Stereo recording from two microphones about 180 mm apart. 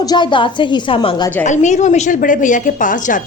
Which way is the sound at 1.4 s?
40° left (ahead or behind).